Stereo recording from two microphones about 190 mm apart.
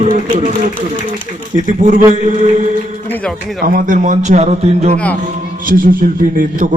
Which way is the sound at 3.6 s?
45° right (ahead or behind).